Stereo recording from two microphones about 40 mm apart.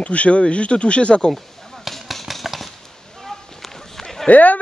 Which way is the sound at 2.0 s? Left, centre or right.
Centre.